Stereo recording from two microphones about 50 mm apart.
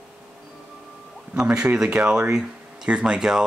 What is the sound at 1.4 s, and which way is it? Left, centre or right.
Speech, right.